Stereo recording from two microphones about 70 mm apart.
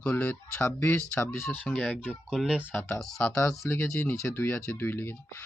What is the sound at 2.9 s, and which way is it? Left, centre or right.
Speech, left.